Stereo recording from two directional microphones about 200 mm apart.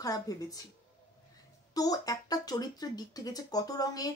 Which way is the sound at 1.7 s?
20° left (ahead or behind).